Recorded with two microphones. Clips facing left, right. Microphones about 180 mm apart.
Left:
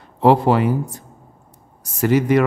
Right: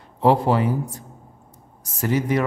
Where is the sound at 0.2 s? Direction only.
75° left (ahead or behind).